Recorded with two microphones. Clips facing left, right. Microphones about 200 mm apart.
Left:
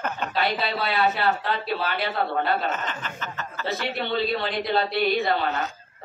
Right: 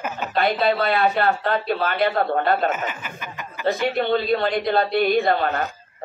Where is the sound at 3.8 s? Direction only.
50° right (ahead or behind).